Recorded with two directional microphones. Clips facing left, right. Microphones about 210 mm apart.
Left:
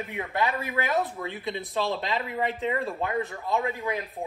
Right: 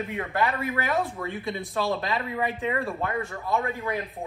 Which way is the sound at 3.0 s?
15° left (ahead or behind).